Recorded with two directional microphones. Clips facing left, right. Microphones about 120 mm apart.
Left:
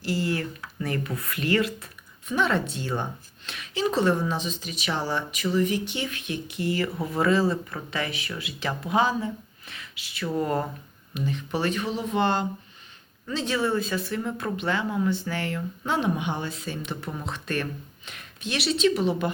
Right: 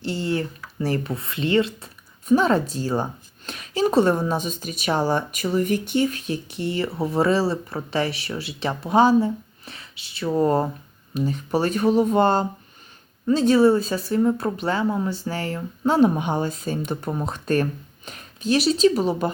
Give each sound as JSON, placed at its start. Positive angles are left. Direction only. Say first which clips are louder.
{"t": 0.0, "sound": "speech", "louder": "right 2 dB", "side_deg": -25}
{"t": 2.2, "sound": "speech", "louder": "right 7 dB", "side_deg": -40}